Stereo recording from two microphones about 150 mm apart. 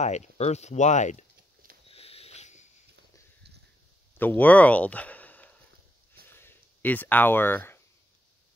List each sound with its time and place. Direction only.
0.0 s speech: 50° left (ahead or behind)
1.9 s sniff: 40° left (ahead or behind)
4.2 s speech: 10° left (ahead or behind)
6.2 s a sound: 15° left (ahead or behind)